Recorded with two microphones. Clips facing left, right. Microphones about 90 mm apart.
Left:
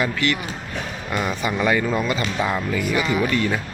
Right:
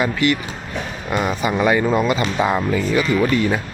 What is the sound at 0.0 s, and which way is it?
Speech, 15° right (ahead or behind).